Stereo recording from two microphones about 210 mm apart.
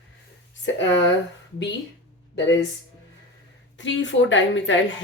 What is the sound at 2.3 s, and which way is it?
Speech, 55° left (ahead or behind).